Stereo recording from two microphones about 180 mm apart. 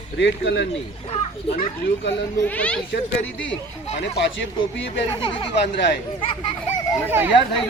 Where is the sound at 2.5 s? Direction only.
10° left (ahead or behind).